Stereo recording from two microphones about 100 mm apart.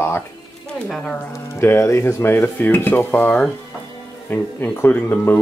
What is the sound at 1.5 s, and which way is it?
Speech, 25° left (ahead or behind).